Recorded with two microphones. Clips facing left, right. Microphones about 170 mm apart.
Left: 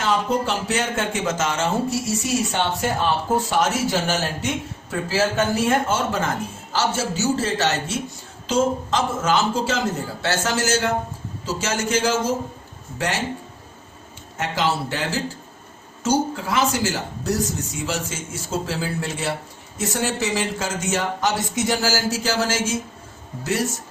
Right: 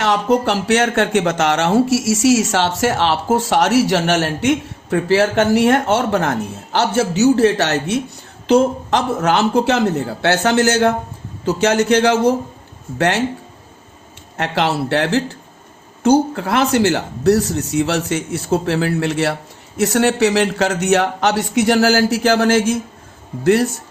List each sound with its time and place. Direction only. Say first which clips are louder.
0.0 s speech: right 6 dB; 75° right (ahead or behind)
14.3 s speech: right 5 dB; 65° right (ahead or behind)